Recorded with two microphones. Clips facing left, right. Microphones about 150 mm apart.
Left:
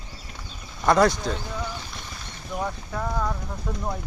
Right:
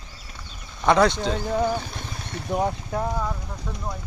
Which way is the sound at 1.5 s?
50° right (ahead or behind).